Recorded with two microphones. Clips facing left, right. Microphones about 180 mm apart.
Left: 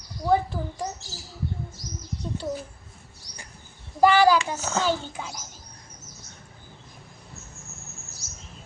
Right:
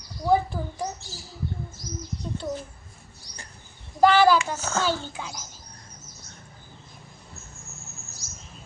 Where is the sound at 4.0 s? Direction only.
10° left (ahead or behind).